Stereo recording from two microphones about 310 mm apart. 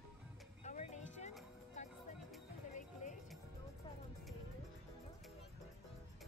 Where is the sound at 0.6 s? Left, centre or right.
Left.